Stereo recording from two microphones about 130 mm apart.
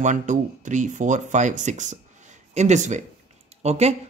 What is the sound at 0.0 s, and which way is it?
Speech, 70° right (ahead or behind).